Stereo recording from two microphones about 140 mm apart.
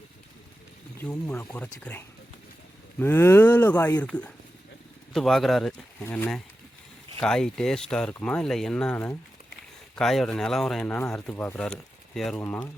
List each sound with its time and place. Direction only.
0.9 s speech: 15° left (ahead or behind)
5.7 s speech: 15° left (ahead or behind)
7.2 s speech: 5° left (ahead or behind)